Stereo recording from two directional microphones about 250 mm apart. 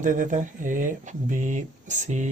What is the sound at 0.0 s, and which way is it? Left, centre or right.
Speech, right.